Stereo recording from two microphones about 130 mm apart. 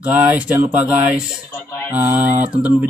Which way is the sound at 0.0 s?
10° right (ahead or behind).